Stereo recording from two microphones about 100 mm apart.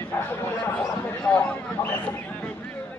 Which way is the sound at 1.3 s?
15° left (ahead or behind).